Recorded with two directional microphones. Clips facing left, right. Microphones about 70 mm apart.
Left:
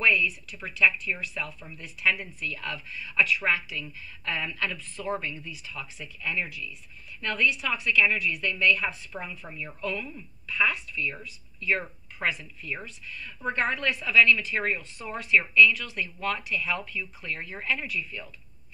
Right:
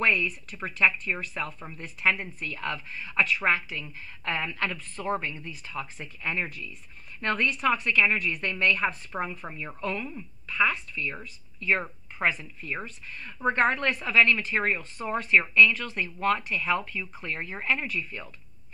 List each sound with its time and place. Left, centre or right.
0.0 s speech: right